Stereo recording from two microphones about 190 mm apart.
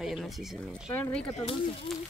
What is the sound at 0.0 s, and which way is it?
Speech, 5° right (ahead or behind).